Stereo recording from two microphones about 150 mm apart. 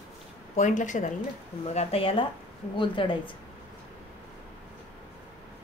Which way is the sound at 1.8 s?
40° left (ahead or behind).